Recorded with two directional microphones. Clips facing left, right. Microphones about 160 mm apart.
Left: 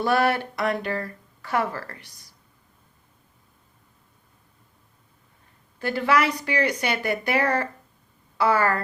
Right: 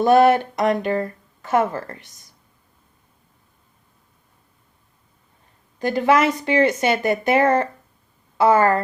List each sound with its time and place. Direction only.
0.0 s speech: 20° right (ahead or behind)
5.8 s speech: 20° right (ahead or behind)